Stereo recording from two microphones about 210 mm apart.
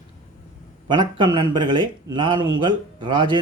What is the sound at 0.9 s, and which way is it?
Speech, 20° right (ahead or behind).